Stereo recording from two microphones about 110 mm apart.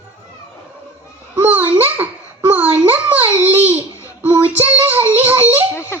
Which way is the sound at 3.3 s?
15° right (ahead or behind).